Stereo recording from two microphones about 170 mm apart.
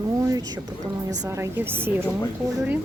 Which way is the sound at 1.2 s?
15° right (ahead or behind).